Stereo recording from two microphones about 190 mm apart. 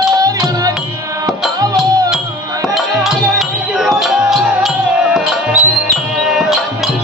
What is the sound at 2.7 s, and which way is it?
Music, centre (ahead or behind).